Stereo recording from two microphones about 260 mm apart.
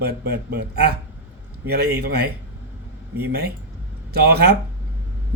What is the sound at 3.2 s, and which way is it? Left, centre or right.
Speech, right.